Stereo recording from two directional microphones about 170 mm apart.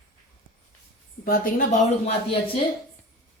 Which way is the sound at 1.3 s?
55° left (ahead or behind).